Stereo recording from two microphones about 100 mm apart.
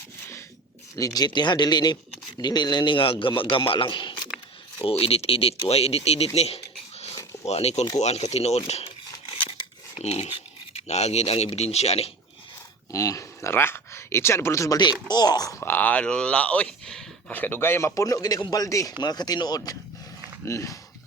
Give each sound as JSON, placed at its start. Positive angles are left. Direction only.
{"t": 0.9, "sound": "a man's voice", "side_deg": 35}
{"t": 4.8, "sound": "speech", "side_deg": 70}
{"t": 9.3, "sound": "scissors", "side_deg": 80}
{"t": 10.8, "sound": "speech", "side_deg": 90}
{"t": 12.9, "sound": "speech", "side_deg": 35}
{"t": 15.0, "sound": "a man's voice", "side_deg": 45}
{"t": 15.6, "sound": "speech", "side_deg": 20}
{"t": 17.3, "sound": "a man's voice", "side_deg": 20}
{"t": 20.4, "sound": "speech", "side_deg": 30}